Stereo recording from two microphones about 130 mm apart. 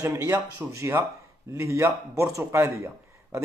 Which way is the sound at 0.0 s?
25° right (ahead or behind).